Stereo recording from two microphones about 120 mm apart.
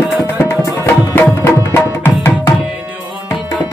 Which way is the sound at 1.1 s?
20° left (ahead or behind).